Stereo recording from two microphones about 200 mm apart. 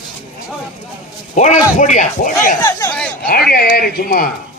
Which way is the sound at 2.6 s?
20° left (ahead or behind).